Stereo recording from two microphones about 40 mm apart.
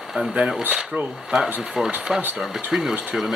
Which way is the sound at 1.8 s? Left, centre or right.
Right.